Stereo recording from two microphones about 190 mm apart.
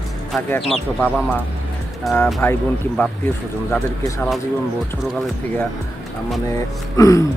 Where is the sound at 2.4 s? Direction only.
10° left (ahead or behind).